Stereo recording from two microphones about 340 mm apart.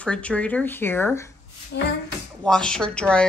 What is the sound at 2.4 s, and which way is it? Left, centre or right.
Speech, centre.